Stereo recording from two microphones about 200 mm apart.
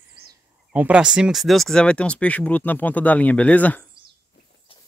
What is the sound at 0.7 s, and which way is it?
Speech, 5° right (ahead or behind).